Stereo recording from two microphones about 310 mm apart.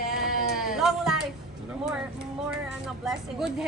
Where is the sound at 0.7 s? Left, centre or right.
Centre.